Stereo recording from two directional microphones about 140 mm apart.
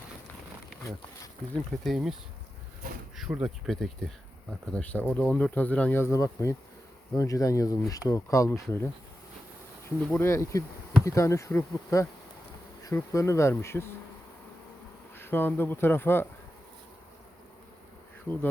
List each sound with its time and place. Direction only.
1.8 s speech: centre (ahead or behind)
3.2 s speech: 5° right (ahead or behind); by 8.6 s 20° left (ahead or behind)
10.1 s speech: 20° left (ahead or behind)
15.1 s speech: 15° left (ahead or behind)
18.3 s speech: 15° left (ahead or behind)